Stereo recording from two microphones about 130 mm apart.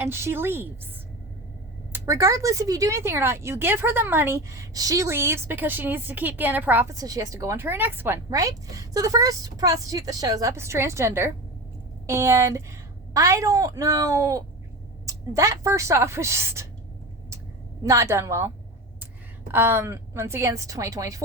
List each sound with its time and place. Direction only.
0.0 s a woman's voice: 20° right (ahead or behind)
1.9 s speech: 25° right (ahead or behind)
6.9 s speech: 25° right (ahead or behind)
17.8 s speech: 20° right (ahead or behind)